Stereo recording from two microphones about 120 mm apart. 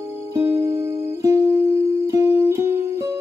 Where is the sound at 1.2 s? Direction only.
30° right (ahead or behind).